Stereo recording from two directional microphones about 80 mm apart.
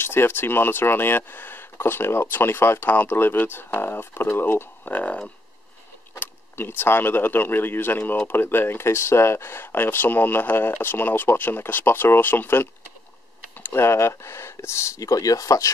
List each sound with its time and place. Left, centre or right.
0.0 s speech: left